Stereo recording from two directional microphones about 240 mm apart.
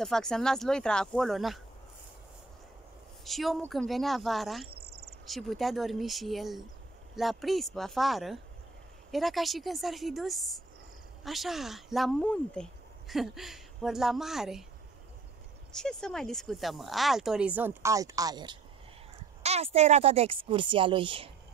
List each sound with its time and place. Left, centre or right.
0.0 s speech: centre
3.3 s speech: centre
4.7 s cricket: right
5.2 s speech: centre
15.7 s speech: centre; by 21.3 s right